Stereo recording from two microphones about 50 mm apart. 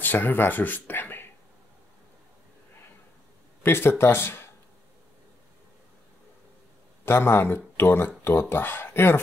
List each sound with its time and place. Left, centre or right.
0.0 s speech: left
3.6 s speech: left
7.1 s speech: left